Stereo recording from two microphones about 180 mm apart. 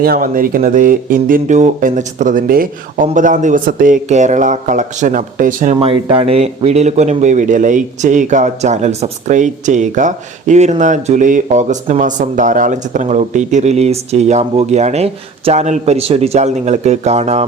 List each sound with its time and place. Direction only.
0.0 s speech: 55° right (ahead or behind); by 17.4 s 35° right (ahead or behind)